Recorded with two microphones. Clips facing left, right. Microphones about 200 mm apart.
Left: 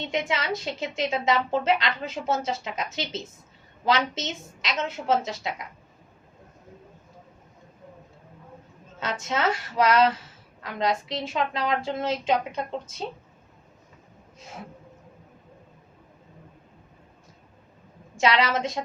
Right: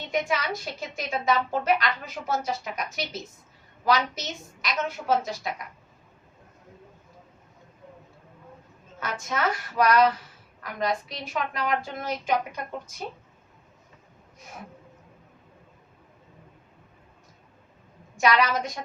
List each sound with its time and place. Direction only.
0.0 s speech: 25° left (ahead or behind)
9.0 s speech: 25° left (ahead or behind)
18.2 s speech: 25° left (ahead or behind)